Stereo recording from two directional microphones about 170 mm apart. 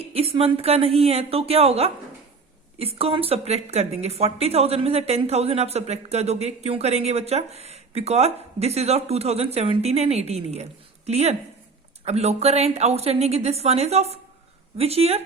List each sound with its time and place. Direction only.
0.1 s speech: 35° right (ahead or behind)